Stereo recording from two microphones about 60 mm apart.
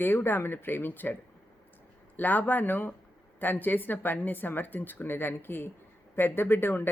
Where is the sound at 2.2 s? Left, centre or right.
Left.